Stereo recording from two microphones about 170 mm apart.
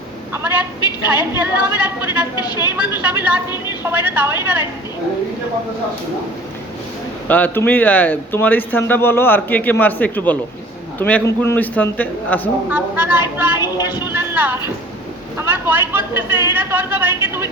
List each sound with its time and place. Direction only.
1.1 s a woman's voice: 10° right (ahead or behind)
2.3 s speech: 25° left (ahead or behind)
2.7 s a woman's voice: 10° right (ahead or behind)
7.3 s speech: 10° left (ahead or behind)
12.7 s a woman's voice: 10° right (ahead or behind)
13.6 s speech: 25° left (ahead or behind)
14.1 s a sound: 10° right (ahead or behind)
15.4 s a woman's voice: 10° right (ahead or behind)